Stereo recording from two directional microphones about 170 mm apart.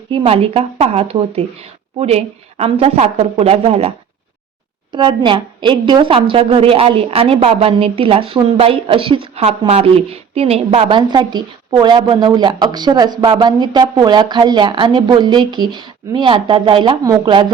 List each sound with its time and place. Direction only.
0.1 s a woman's voice: 35° right (ahead or behind)